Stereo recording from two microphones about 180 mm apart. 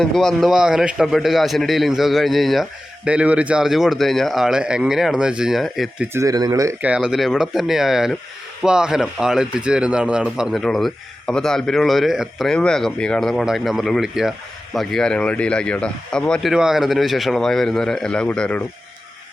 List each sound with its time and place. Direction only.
0.0 s speech: 5° left (ahead or behind)
6.1 s speech: 20° right (ahead or behind)
6.9 s speech: 5° right (ahead or behind)